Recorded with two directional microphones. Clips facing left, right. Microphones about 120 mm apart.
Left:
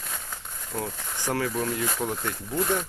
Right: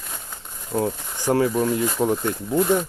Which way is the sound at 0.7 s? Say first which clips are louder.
Right 9 dB; 30° right (ahead or behind).